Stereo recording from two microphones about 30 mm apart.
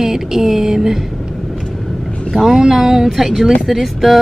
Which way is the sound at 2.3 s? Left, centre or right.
Centre.